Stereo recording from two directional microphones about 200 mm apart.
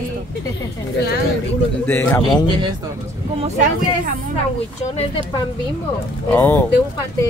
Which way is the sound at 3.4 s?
35° right (ahead or behind).